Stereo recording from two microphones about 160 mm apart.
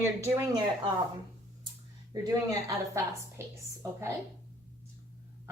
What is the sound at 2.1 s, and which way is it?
A woman's voice, 20° right (ahead or behind).